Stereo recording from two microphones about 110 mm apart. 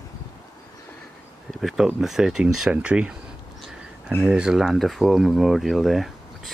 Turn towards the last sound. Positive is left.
turn(degrees=0)  # may be behind; listen again after turning